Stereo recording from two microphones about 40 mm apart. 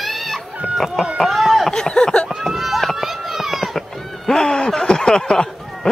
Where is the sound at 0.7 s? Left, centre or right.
Centre.